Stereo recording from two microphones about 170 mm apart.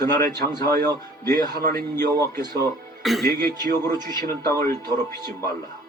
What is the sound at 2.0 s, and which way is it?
Speech, 15° left (ahead or behind).